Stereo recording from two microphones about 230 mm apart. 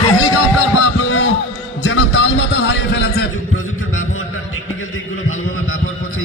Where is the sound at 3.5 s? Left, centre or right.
Left.